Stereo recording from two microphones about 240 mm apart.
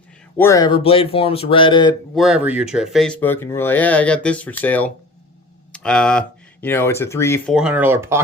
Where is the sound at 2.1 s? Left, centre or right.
Centre.